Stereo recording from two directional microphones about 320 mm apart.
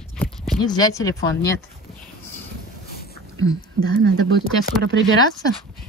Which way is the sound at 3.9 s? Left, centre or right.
Right.